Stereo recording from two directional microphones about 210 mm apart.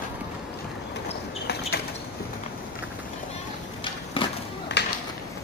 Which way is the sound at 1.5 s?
50° left (ahead or behind).